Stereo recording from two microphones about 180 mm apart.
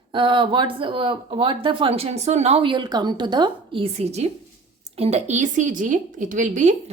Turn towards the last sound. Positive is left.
turn(degrees=-45)  # may be behind; listen again after turning